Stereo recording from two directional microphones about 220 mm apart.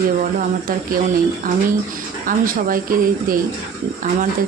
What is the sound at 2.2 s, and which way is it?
Speech, 40° right (ahead or behind).